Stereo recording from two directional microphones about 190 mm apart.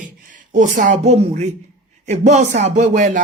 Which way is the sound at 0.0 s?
45° right (ahead or behind).